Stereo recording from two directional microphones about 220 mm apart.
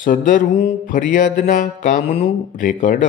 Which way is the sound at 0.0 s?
35° left (ahead or behind).